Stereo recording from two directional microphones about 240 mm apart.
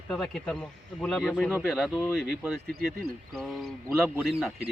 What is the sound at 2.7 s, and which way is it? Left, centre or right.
Speech, right.